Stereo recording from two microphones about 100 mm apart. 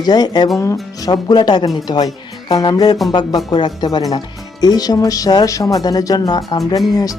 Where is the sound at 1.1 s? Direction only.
45° left (ahead or behind).